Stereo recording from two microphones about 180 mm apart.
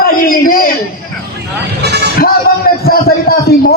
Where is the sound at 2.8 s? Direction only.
55° left (ahead or behind).